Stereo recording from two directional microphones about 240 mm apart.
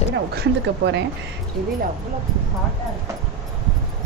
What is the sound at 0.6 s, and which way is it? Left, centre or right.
Speech, right.